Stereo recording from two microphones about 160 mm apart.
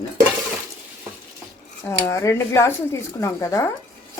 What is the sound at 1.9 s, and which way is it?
Speech, 20° left (ahead or behind).